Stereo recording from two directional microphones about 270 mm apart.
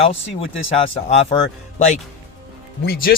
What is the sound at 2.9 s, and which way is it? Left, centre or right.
Speech, left.